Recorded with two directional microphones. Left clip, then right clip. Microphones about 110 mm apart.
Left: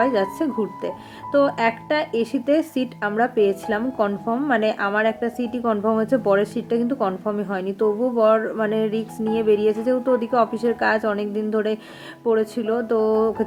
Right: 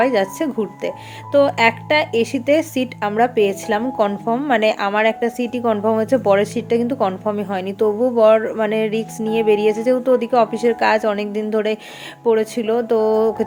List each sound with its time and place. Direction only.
0.0 s speech: 25° right (ahead or behind)